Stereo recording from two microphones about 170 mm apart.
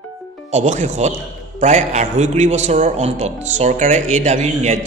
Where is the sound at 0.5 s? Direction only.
40° right (ahead or behind).